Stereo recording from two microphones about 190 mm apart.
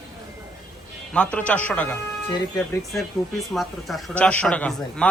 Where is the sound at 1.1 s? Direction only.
5° left (ahead or behind).